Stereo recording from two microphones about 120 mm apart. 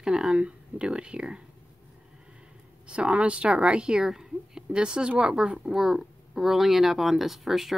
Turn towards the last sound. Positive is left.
turn(degrees=0)  # may be behind; listen again after turning